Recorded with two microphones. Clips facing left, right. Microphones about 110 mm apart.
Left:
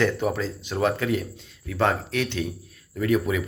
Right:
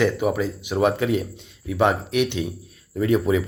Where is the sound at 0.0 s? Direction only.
10° right (ahead or behind).